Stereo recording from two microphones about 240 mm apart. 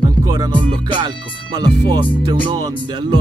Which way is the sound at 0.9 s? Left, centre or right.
Centre.